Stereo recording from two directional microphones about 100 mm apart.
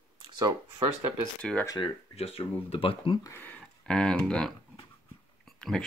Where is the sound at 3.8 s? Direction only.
10° left (ahead or behind).